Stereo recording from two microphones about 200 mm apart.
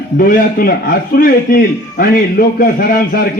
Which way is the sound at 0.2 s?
45° left (ahead or behind).